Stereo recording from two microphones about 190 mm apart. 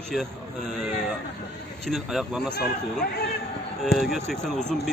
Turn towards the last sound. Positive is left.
turn(degrees=0)  # may be behind; listen again after turning